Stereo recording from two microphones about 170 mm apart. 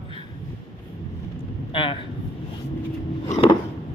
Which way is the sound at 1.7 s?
30° left (ahead or behind).